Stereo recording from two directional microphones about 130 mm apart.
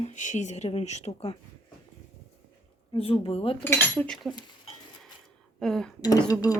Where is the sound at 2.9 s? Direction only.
50° left (ahead or behind).